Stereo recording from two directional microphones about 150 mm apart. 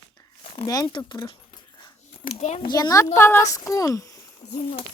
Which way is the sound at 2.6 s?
25° left (ahead or behind).